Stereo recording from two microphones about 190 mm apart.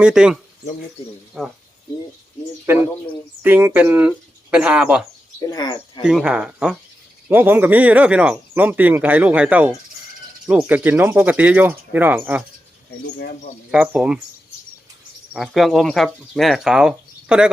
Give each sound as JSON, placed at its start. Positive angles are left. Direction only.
{"t": 0.0, "sound": "speech", "side_deg": -5}
{"t": 1.4, "sound": "speech", "side_deg": 0}
{"t": 2.7, "sound": "speech", "side_deg": -10}
{"t": 5.4, "sound": "speech", "side_deg": 20}
{"t": 6.0, "sound": "speech", "side_deg": -5}
{"t": 13.7, "sound": "speech", "side_deg": -5}
{"t": 15.3, "sound": "speech", "side_deg": 0}